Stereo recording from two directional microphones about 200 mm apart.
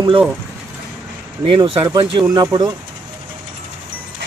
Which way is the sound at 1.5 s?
25° right (ahead or behind).